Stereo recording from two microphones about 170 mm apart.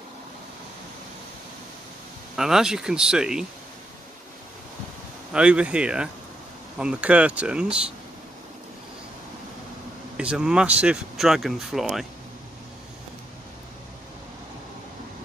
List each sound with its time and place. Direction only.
2.3 s speech: 5° right (ahead or behind)
5.3 s speech: 5° right (ahead or behind)
10.1 s speech: 5° right (ahead or behind)